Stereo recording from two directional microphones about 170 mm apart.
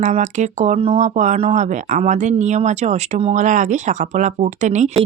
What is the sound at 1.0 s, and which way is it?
Speech, 45° right (ahead or behind).